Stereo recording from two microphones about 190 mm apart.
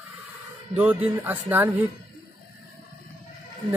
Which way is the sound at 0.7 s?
10° right (ahead or behind).